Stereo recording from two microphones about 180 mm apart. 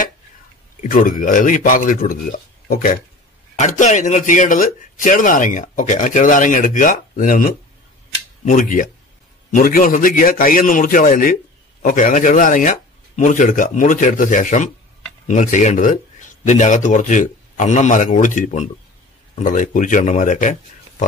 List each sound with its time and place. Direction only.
0.8 s speech: 50° left (ahead or behind)